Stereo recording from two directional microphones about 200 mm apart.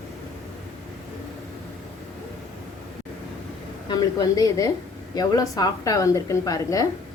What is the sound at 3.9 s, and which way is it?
A woman's voice, 20° left (ahead or behind).